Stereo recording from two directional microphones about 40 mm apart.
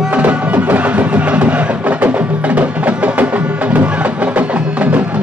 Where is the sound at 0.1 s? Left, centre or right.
Right.